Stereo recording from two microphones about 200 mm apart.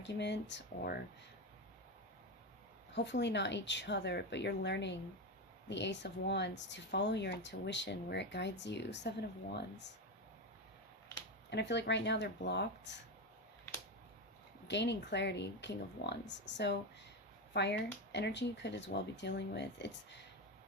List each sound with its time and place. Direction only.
0.0 s speech: 60° left (ahead or behind)
2.9 s speech: 60° left (ahead or behind)
11.5 s speech: 60° left (ahead or behind)
14.7 s speech: 60° left (ahead or behind)